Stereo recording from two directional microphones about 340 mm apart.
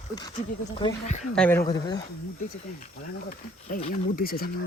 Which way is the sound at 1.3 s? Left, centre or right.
Centre.